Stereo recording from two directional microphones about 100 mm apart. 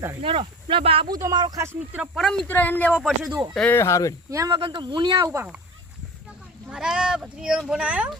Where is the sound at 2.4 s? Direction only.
20° left (ahead or behind).